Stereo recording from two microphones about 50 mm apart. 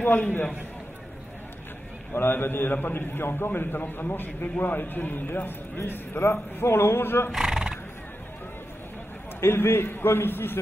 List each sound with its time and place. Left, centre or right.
0.0 s a man's voice: left
2.1 s a man's voice: left
6.3 s a man's voice: left
7.3 s neigh: centre
9.4 s a man's voice: left